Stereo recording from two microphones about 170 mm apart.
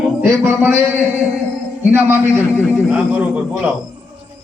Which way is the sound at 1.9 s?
15° right (ahead or behind).